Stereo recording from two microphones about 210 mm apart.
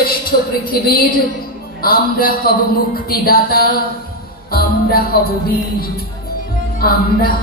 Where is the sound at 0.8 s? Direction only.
45° left (ahead or behind).